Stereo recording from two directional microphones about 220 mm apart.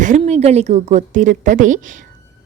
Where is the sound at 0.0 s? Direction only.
30° right (ahead or behind).